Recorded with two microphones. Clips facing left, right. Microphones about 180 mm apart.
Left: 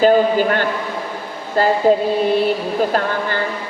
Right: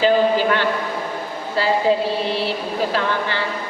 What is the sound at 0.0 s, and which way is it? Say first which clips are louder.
A woman's voice: left 3 dB; 50° left (ahead or behind).